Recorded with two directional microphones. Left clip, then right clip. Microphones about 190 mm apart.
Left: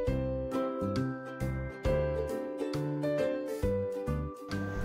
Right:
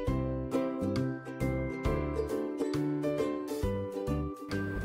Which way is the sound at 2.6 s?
Centre (ahead or behind).